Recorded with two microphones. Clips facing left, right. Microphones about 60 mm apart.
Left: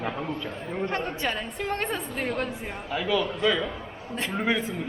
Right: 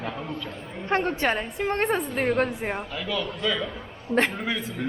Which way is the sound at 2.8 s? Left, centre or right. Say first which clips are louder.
Left 4 dB; centre.